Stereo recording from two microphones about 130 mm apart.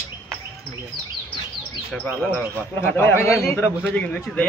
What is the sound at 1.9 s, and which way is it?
A man's voice, 10° left (ahead or behind).